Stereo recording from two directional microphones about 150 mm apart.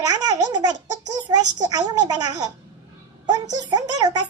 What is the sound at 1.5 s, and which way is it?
Speech, 25° right (ahead or behind).